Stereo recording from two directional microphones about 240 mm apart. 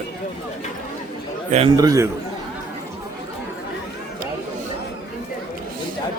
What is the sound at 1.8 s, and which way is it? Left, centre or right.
Speech, centre.